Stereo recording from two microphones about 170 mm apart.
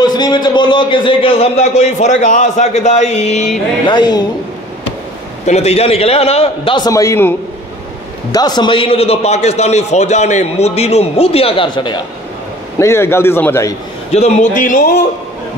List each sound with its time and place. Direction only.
0.0 s a man's voice: 25° left (ahead or behind); by 3.4 s 40° left (ahead or behind)
3.8 s a woman's voice: 25° left (ahead or behind)
5.5 s a man's voice: 35° left (ahead or behind)
12.7 s a man's voice: 15° left (ahead or behind)
14.1 s speech: 45° left (ahead or behind)